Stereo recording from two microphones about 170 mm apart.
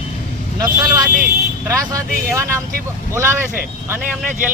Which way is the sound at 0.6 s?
20° right (ahead or behind).